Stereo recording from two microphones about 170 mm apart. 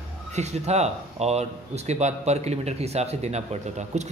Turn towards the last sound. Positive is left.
turn(degrees=-40)  # may be behind; listen again after turning